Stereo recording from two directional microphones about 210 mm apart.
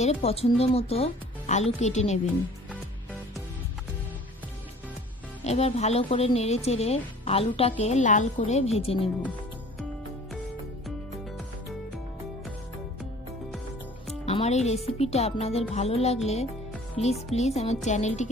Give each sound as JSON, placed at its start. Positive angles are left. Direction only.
{"t": 0.0, "sound": "speech", "side_deg": 30}
{"t": 5.4, "sound": "speech", "side_deg": 30}
{"t": 14.2, "sound": "music", "side_deg": 30}
{"t": 15.0, "sound": "speech", "side_deg": 30}